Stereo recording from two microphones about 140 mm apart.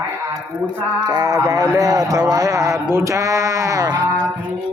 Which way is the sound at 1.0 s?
30° right (ahead or behind).